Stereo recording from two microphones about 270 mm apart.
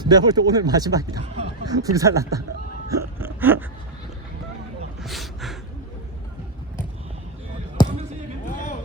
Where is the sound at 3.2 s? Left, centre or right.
Centre.